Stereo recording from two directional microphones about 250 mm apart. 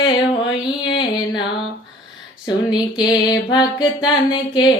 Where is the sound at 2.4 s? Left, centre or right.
Centre.